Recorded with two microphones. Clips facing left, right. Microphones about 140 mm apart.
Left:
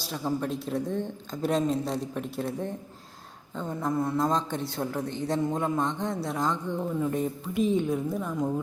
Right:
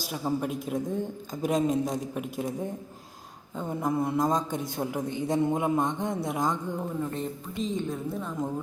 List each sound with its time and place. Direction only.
0.1 s speech: 10° right (ahead or behind)
3.7 s a sound: 20° right (ahead or behind)
4.8 s speech: 20° right (ahead or behind)
6.0 s a sound: 20° right (ahead or behind)
7.0 s speech: 10° left (ahead or behind)
7.9 s a woman's voice: centre (ahead or behind)